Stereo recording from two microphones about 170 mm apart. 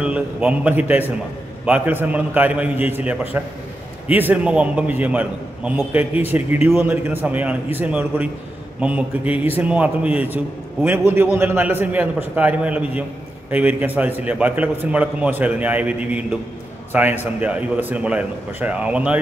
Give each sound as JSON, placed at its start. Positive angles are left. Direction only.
{"t": 0.0, "sound": "a man's voice", "side_deg": -5}